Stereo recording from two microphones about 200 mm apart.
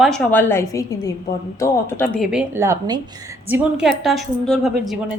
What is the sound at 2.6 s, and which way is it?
A woman's voice, 15° right (ahead or behind).